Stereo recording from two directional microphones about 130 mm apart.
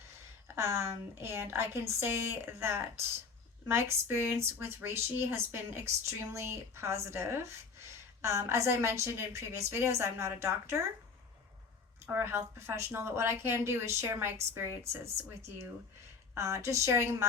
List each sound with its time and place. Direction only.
0.4 s speech: 20° right (ahead or behind)
12.0 s speech: 15° right (ahead or behind)